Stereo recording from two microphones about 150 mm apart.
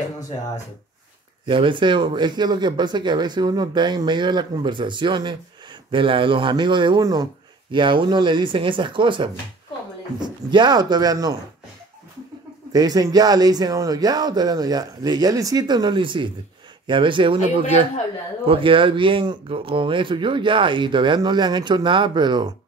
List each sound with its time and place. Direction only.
1.4 s speech: 35° right (ahead or behind)
12.7 s speech: 25° right (ahead or behind)